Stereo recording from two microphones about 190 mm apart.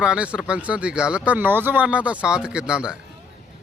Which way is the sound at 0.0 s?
5° right (ahead or behind).